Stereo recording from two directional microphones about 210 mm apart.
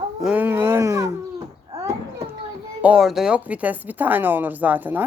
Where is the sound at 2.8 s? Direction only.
5° right (ahead or behind).